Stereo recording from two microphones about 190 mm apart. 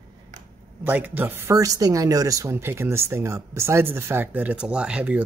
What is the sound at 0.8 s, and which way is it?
Speech, 10° right (ahead or behind).